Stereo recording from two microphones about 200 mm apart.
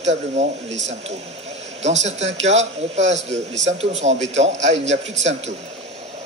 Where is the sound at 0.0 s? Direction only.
35° right (ahead or behind).